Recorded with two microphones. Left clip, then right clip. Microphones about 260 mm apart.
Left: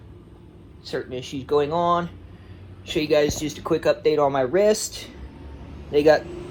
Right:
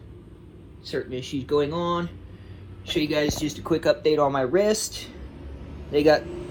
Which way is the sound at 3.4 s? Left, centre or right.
Right.